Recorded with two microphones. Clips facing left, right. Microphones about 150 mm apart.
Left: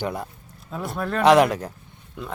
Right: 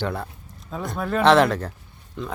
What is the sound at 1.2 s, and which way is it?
Speech, 10° left (ahead or behind).